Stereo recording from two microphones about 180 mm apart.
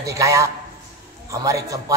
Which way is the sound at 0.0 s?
15° right (ahead or behind).